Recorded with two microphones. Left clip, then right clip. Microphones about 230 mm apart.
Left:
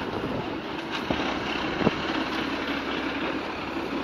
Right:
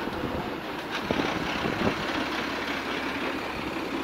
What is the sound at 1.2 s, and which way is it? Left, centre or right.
Vehicle, right.